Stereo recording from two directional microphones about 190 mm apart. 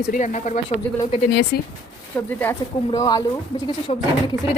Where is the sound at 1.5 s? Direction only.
60° left (ahead or behind).